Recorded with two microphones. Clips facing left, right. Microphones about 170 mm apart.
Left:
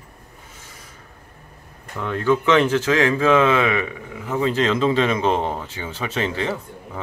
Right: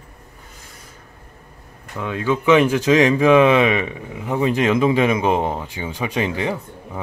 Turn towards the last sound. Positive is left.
turn(degrees=-15)  # may be behind; listen again after turning